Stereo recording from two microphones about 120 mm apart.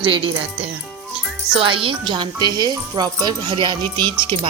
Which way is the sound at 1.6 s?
45° right (ahead or behind).